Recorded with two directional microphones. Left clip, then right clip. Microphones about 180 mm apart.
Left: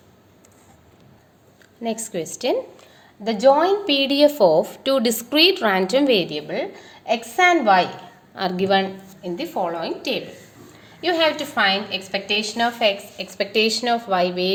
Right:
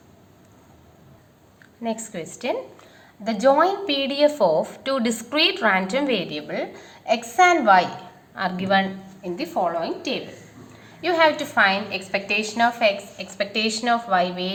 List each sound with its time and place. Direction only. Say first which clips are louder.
2.1 s a woman's voice: left 6 dB; 50° left (ahead or behind)
3.2 s a woman's voice: left 2 dB; 40° left (ahead or behind)
7.2 s a woman's voice: even; 40° left (ahead or behind)
8.4 s a woman's voice: left 2 dB; 50° left (ahead or behind)